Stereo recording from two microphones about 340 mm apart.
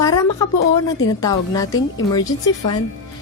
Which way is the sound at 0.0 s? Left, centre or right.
Centre.